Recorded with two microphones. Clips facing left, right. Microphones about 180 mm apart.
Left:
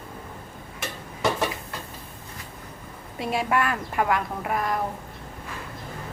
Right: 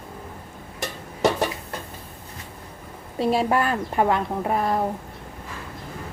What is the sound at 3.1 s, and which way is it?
Speech, 30° right (ahead or behind).